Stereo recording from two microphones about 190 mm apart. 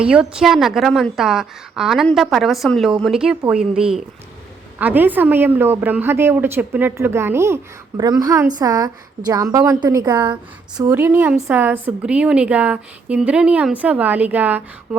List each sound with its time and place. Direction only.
0.0 s a woman's voice: 5° right (ahead or behind)